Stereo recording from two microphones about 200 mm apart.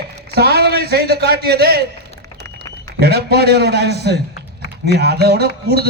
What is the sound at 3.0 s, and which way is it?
A man's voice, 55° right (ahead or behind).